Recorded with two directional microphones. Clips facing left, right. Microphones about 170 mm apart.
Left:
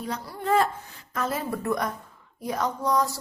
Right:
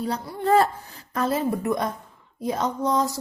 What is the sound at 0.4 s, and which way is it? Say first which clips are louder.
Speech: right 4 dB; 35° right (ahead or behind).